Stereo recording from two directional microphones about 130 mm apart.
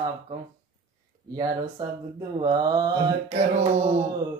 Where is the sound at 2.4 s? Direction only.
30° right (ahead or behind).